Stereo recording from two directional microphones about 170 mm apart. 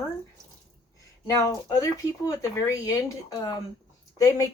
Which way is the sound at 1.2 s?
20° left (ahead or behind).